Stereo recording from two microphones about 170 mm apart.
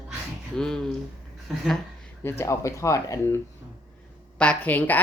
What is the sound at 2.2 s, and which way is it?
Speech, 15° left (ahead or behind).